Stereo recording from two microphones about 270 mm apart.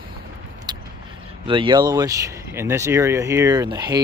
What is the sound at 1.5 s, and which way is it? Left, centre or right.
Speech, centre.